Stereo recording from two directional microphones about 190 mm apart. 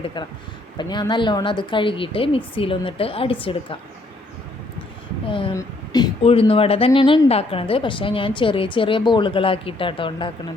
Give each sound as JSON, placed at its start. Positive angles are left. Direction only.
{"t": 0.8, "sound": "speech", "side_deg": 25}
{"t": 5.3, "sound": "speech", "side_deg": 25}